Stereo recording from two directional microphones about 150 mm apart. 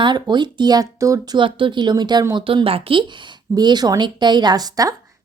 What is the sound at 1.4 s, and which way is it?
Speech, 35° right (ahead or behind).